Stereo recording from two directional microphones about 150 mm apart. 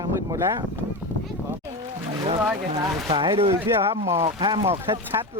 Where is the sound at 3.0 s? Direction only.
35° right (ahead or behind).